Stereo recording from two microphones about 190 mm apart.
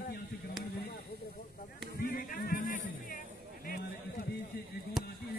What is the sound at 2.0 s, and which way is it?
Music, 50° left (ahead or behind).